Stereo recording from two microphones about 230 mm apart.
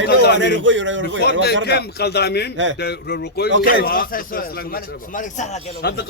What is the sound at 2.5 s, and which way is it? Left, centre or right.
Speech, right.